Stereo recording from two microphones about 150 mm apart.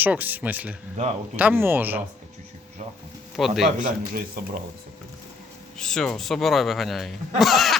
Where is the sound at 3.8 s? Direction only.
70° right (ahead or behind).